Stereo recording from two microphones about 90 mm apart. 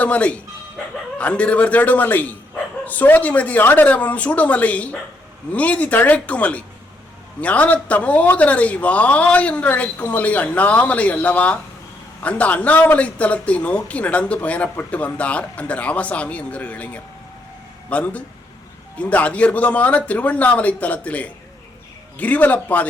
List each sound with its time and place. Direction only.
0.0 s a man's voice: 15° left (ahead or behind)